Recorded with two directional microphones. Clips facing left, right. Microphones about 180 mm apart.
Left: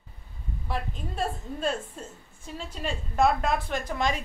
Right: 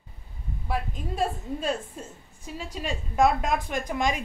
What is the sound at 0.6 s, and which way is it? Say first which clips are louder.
A woman's voice: right 3 dB; 10° right (ahead or behind).